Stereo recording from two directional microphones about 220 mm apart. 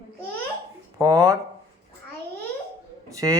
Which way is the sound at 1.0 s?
15° right (ahead or behind).